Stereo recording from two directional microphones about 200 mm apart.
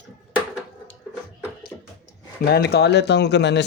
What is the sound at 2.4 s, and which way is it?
Speech, 55° left (ahead or behind).